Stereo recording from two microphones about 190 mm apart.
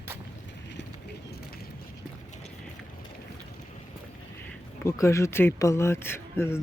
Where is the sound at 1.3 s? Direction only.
55° left (ahead or behind).